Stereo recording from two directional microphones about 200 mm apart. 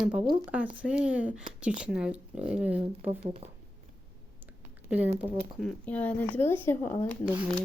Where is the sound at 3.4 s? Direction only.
30° right (ahead or behind).